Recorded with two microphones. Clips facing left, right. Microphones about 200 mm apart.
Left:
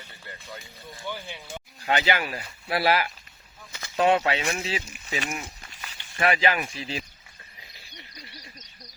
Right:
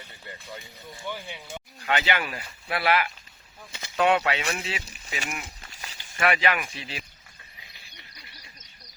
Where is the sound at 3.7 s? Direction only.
20° right (ahead or behind).